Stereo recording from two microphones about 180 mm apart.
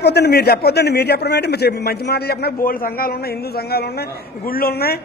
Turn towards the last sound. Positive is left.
turn(degrees=60)  # may be behind; listen again after turning